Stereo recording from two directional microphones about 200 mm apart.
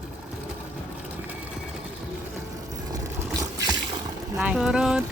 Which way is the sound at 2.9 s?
20° right (ahead or behind).